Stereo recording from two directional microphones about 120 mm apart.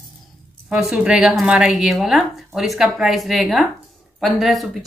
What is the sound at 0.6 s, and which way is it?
Speech, 5° right (ahead or behind).